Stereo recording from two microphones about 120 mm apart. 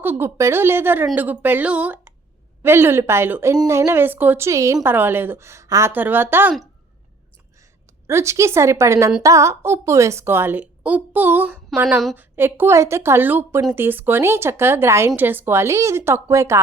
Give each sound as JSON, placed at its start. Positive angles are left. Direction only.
{"t": 0.0, "sound": "a woman's voice", "side_deg": -20}
{"t": 5.9, "sound": "a woman's voice", "side_deg": -15}
{"t": 8.0, "sound": "speech", "side_deg": -25}